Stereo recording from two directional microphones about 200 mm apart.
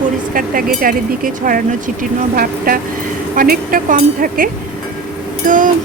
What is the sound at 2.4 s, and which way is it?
A woman's voice, 45° right (ahead or behind).